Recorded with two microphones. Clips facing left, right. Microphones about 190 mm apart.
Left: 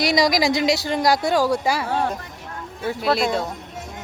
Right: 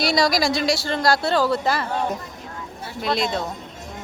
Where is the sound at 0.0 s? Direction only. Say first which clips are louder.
Left 1 dB; 15° left (ahead or behind).